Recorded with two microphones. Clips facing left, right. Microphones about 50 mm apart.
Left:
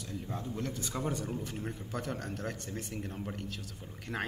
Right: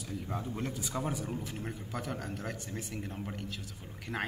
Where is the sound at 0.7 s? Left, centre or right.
Centre.